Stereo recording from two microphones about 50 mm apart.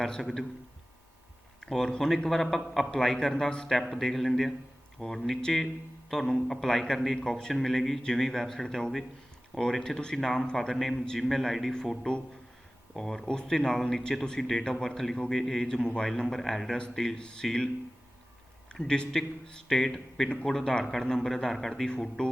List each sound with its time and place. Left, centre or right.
0.0 s speech: centre
1.6 s speech: centre
18.7 s speech: centre